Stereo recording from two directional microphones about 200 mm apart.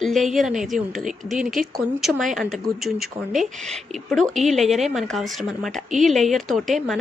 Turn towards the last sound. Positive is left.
turn(degrees=0)  # may be behind; listen again after turning